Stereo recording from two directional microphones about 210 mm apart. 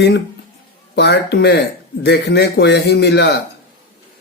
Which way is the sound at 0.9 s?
55° left (ahead or behind).